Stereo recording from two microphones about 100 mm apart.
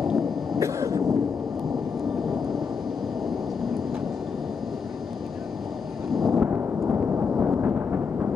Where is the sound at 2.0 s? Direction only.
Centre (ahead or behind).